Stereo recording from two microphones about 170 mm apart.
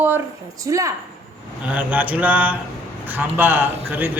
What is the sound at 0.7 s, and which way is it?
A man's voice, 20° right (ahead or behind).